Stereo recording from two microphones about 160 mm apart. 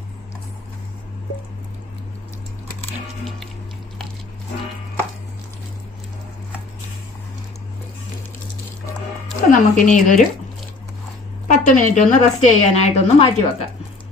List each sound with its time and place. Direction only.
9.5 s a woman's voice: 50° left (ahead or behind)
11.4 s a woman's voice: 50° left (ahead or behind)